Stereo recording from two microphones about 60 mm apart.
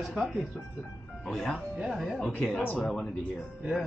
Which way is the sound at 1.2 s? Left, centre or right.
Centre.